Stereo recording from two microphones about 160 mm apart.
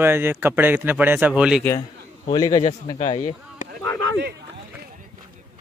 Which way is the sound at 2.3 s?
25° left (ahead or behind).